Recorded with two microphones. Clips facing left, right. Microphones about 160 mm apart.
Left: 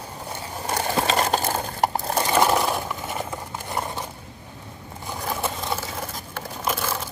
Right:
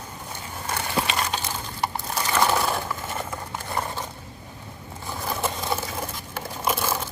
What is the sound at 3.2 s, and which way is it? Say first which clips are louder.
Horse: left 1 dB; 20° left (ahead or behind).